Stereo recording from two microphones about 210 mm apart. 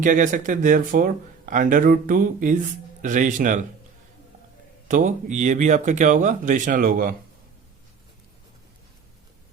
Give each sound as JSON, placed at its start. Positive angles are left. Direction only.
{"t": 0.0, "sound": "speech", "side_deg": -40}
{"t": 4.9, "sound": "speech", "side_deg": -35}